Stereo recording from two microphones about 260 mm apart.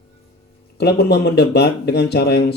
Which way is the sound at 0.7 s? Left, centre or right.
Left.